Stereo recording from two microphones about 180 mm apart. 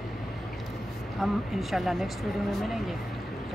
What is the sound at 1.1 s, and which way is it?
Speech, centre (ahead or behind).